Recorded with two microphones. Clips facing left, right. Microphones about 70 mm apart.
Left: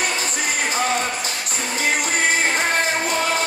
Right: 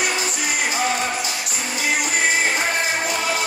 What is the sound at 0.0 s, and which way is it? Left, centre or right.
Music, left.